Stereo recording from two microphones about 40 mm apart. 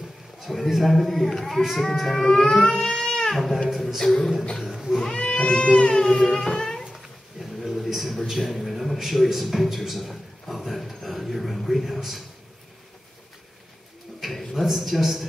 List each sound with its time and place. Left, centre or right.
0.4 s a man's voice: centre
2.0 s music: centre
2.8 s crying: centre
3.3 s a man's voice: centre
4.0 s music: centre
4.6 s speech: centre
5.0 s cat: centre
6.8 s a sound: centre
8.3 s a man's voice: centre
14.2 s a sound: centre